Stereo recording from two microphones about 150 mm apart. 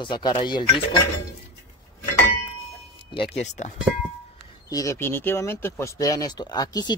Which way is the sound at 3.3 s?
50° left (ahead or behind).